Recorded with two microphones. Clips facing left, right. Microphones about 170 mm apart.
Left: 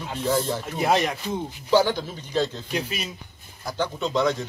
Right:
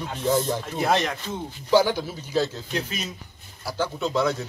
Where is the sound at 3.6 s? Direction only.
5° right (ahead or behind).